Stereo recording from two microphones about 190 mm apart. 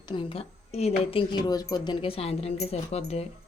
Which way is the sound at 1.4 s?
20° left (ahead or behind).